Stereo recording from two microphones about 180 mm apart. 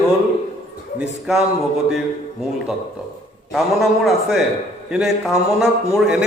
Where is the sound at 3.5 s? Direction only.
Centre (ahead or behind).